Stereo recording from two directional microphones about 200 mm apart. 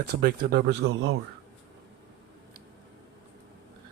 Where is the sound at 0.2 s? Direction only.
50° right (ahead or behind); by 1.2 s 70° right (ahead or behind).